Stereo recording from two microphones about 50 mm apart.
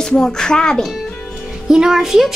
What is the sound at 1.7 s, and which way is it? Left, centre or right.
Speech, centre.